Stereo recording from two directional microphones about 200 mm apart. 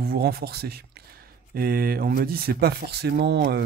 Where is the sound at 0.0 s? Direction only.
50° right (ahead or behind).